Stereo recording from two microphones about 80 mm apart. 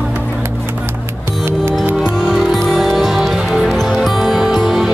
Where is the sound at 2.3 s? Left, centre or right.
Centre.